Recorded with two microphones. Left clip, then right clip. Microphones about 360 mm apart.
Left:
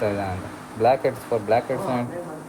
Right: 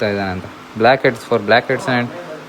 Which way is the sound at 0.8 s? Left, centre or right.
Right.